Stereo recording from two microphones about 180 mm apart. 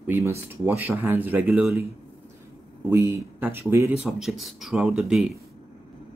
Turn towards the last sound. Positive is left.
turn(degrees=-5)  # may be behind; listen again after turning